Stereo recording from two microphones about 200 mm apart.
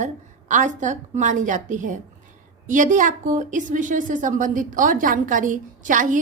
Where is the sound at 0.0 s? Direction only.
40° right (ahead or behind).